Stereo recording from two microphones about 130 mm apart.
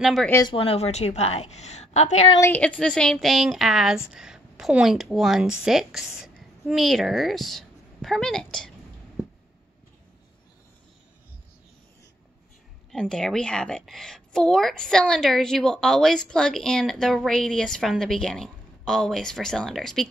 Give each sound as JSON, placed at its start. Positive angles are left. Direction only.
{"t": 0.0, "sound": "a woman's voice", "side_deg": 0}
{"t": 0.5, "sound": "a woman's voice", "side_deg": 45}
{"t": 2.4, "sound": "a woman's voice", "side_deg": 10}
{"t": 12.9, "sound": "a woman's voice", "side_deg": 5}